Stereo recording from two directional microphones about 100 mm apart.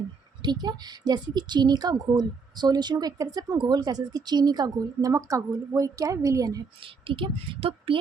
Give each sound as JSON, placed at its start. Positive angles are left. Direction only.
{"t": 0.4, "sound": "a woman's voice", "side_deg": -45}
{"t": 6.7, "sound": "a woman's voice", "side_deg": -60}